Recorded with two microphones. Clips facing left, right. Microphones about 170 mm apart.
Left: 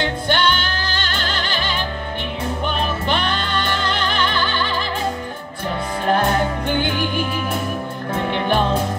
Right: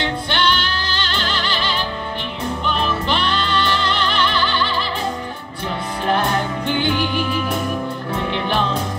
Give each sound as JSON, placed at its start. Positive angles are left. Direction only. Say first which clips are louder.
{"t": 0.0, "sound": "music", "louder": "left 1 dB", "side_deg": 50}
{"t": 6.8, "sound": "music", "louder": "right 1 dB", "side_deg": 45}
{"t": 8.3, "sound": "music", "louder": "left 2 dB", "side_deg": 50}